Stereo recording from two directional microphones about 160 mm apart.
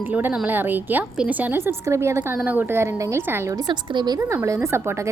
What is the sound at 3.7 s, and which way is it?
A woman's voice, 25° right (ahead or behind).